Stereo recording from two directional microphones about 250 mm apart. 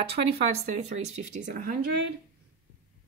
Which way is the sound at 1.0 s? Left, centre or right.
Right.